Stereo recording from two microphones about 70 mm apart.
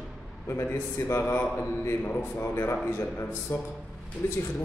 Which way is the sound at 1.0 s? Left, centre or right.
Left.